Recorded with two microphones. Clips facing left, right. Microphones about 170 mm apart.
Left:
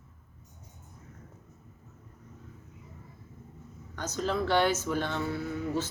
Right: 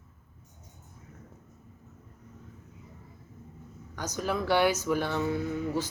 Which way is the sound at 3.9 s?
10° right (ahead or behind).